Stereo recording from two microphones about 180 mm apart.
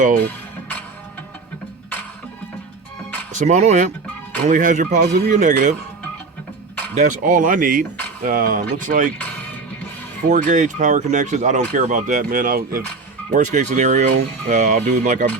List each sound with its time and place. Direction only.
3.3 s speech: 40° right (ahead or behind)
6.9 s speech: 45° right (ahead or behind)
10.2 s speech: 45° right (ahead or behind)
13.3 s speech: 40° right (ahead or behind)